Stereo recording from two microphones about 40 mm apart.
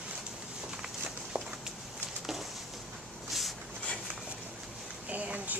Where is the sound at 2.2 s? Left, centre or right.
Centre.